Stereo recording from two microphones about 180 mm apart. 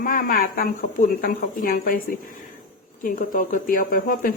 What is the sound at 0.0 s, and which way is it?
Speech, 50° left (ahead or behind).